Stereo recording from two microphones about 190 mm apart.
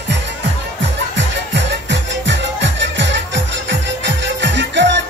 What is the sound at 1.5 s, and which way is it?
Music, 70° right (ahead or behind).